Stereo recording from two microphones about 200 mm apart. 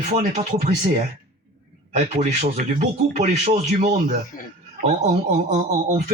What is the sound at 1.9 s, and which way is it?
Speech, 35° right (ahead or behind).